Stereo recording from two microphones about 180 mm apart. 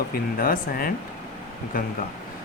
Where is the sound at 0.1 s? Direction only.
55° left (ahead or behind).